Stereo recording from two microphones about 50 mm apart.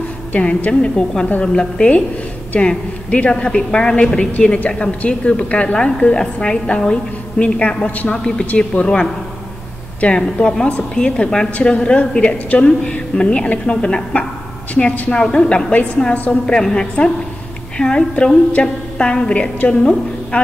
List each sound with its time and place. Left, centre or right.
0.3 s a woman's voice: left
3.1 s a woman's voice: left
8.1 s a woman's voice: centre